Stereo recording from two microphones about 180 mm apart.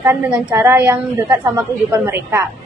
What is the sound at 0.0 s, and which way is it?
A woman's voice, 10° right (ahead or behind).